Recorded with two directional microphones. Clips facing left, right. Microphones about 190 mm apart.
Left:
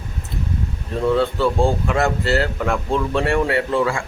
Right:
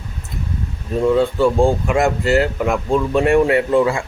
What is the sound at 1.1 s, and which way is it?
A woman's voice, 15° right (ahead or behind).